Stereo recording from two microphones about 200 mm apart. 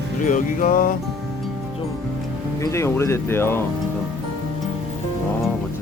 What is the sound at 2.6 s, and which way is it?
Speech, 15° left (ahead or behind).